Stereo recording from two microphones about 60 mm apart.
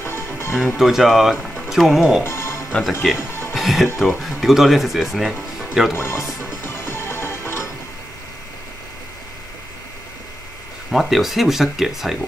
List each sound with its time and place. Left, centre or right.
0.0 s music: left
0.6 s speech: centre
2.2 s music: left
3.0 s speech: centre
3.3 s music: left
3.5 s speech: centre
5.9 s music: left
10.9 s speech: centre